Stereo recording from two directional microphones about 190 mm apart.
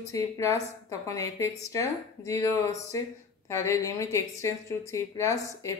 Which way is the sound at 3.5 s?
15° left (ahead or behind).